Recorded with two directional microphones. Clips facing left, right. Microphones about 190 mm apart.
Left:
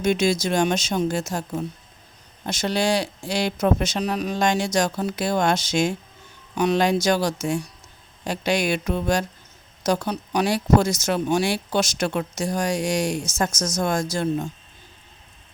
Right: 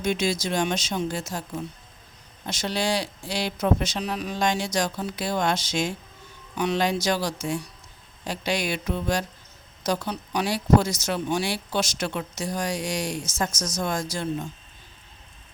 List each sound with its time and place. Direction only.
0.0 s speech: 45° left (ahead or behind)